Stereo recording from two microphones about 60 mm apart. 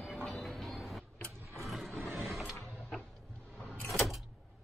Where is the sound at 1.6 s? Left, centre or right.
Centre.